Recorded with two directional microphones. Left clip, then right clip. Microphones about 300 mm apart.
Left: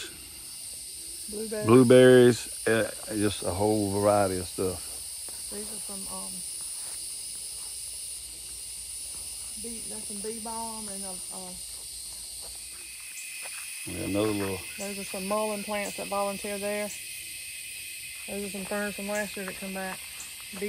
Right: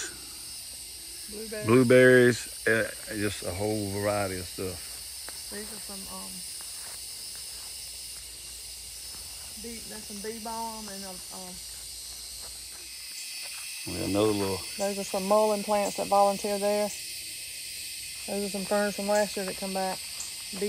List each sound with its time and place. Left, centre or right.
1.7 s speech: centre
10.2 s speech: centre
13.8 s speech: centre
15.0 s speech: right
18.2 s speech: right
18.7 s speech: right
19.0 s speech: centre